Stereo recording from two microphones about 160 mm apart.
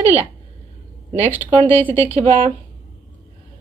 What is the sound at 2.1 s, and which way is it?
Speech, 40° right (ahead or behind).